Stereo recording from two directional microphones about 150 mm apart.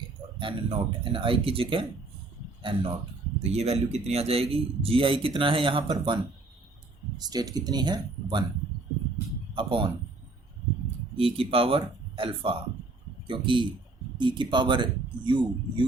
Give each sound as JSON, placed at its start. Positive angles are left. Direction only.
{"t": 0.3, "sound": "a man's voice", "side_deg": -35}
{"t": 3.5, "sound": "a man's voice", "side_deg": -45}
{"t": 7.2, "sound": "speech", "side_deg": -25}
{"t": 9.6, "sound": "a man's voice", "side_deg": -35}
{"t": 11.2, "sound": "a man's voice", "side_deg": -40}